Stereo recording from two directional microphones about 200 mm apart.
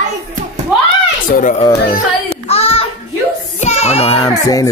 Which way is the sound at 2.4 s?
30° left (ahead or behind).